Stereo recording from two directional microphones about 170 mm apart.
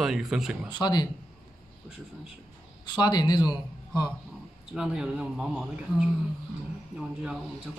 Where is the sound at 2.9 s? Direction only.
25° left (ahead or behind).